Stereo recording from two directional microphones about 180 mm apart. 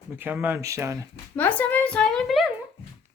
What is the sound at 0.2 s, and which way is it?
Speech, 10° right (ahead or behind).